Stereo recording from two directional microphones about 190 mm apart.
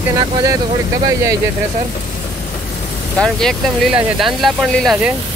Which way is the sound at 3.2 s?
5° left (ahead or behind).